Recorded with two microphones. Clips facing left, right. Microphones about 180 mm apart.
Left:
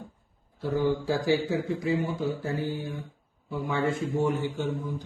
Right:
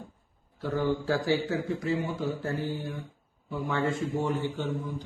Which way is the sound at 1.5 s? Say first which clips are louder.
Left 2 dB; centre (ahead or behind).